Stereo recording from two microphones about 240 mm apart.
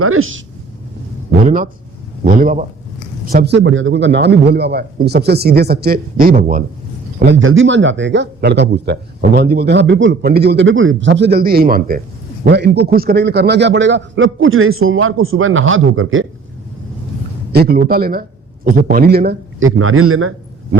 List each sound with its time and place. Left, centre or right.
0.0 s a man's voice: right
1.5 s a man's voice: right
7.3 s a man's voice: right
17.5 s a man's voice: right
19.5 s a man's voice: right